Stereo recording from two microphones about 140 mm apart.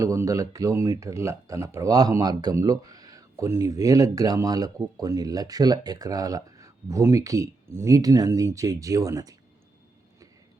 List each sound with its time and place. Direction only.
0.0 s speech: 25° right (ahead or behind)